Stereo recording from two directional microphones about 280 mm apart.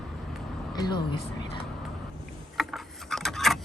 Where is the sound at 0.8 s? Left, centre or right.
Centre.